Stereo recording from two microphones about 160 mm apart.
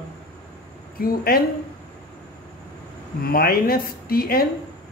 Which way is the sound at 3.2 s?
70° left (ahead or behind).